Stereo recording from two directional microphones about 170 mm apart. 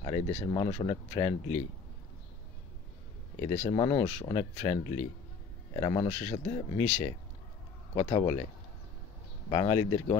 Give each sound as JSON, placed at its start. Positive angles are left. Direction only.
{"t": 0.0, "sound": "speech", "side_deg": 35}
{"t": 3.4, "sound": "speech", "side_deg": 40}
{"t": 9.5, "sound": "speech", "side_deg": 30}